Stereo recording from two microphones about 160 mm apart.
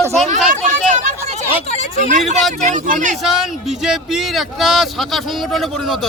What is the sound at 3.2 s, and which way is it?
Speech, centre (ahead or behind).